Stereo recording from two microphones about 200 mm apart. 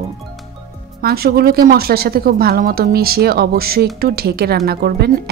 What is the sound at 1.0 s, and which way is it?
Speech, 50° right (ahead or behind).